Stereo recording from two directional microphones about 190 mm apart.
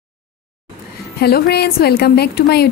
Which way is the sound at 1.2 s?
55° left (ahead or behind).